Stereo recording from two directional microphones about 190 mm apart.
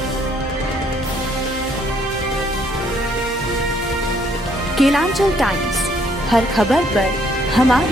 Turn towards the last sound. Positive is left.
turn(degrees=0)  # may be behind; listen again after turning